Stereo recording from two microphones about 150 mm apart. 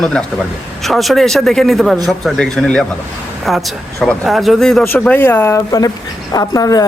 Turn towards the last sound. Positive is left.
turn(degrees=25)  # may be behind; listen again after turning